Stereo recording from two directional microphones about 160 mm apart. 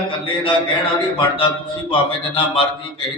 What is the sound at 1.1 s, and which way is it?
Mantra, 35° left (ahead or behind).